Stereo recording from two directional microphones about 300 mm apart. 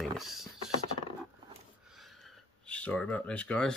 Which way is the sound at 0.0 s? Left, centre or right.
Centre.